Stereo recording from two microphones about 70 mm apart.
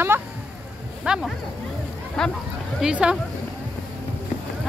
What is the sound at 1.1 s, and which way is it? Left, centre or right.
Speech, centre.